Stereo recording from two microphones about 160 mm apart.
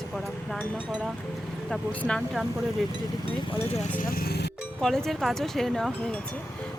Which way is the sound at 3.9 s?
65° left (ahead or behind).